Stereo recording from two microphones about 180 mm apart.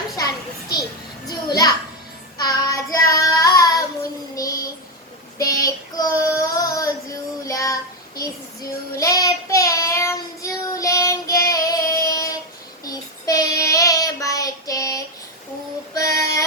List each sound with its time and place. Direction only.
1.3 s a sound: 20° left (ahead or behind)
2.4 s child singing: 20° left (ahead or behind)
16.0 s female singing: 20° left (ahead or behind)